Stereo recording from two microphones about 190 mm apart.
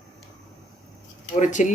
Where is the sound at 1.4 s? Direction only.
40° left (ahead or behind).